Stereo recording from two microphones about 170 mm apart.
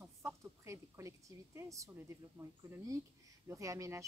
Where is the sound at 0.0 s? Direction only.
15° right (ahead or behind).